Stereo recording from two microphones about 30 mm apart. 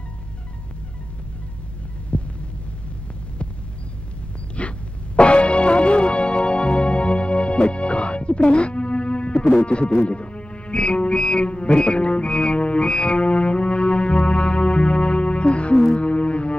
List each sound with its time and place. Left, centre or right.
2.1 s heart sounds: left
4.6 s music: left